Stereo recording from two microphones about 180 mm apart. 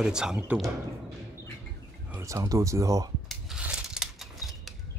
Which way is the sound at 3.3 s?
5° right (ahead or behind).